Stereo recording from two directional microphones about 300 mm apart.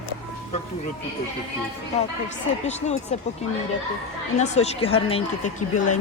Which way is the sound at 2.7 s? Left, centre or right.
Left.